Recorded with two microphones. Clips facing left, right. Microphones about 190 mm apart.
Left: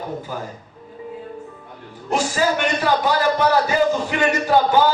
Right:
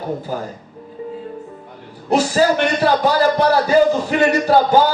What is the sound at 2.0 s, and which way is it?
A man's voice, 40° right (ahead or behind).